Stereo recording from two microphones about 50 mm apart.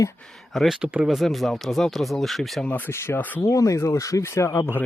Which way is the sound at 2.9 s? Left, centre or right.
Left.